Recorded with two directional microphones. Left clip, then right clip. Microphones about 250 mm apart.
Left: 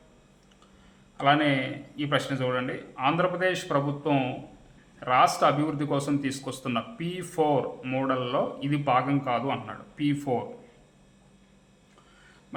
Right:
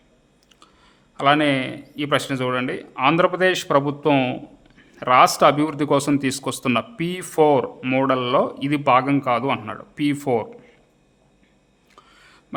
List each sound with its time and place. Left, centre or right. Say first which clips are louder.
1.1 s speech: right 5 dB; right